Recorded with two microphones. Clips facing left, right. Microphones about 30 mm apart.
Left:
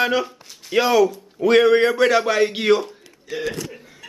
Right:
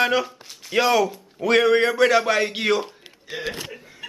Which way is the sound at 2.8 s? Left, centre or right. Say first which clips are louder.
Left 2 dB; right.